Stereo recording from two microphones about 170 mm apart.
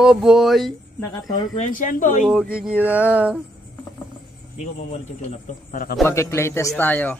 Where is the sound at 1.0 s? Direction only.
20° left (ahead or behind).